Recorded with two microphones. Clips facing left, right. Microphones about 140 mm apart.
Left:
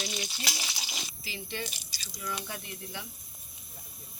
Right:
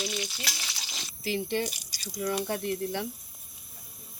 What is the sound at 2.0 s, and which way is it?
Speech, 40° right (ahead or behind).